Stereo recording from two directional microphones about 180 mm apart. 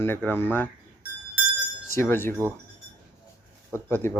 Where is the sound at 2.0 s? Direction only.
15° left (ahead or behind).